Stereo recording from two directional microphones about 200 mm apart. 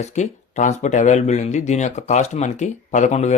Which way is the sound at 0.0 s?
35° left (ahead or behind).